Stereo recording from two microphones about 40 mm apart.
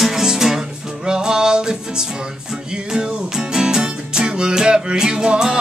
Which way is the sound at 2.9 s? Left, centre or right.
Centre.